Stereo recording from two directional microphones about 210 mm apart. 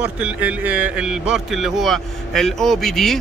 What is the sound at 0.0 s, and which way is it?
A man's voice, 5° right (ahead or behind).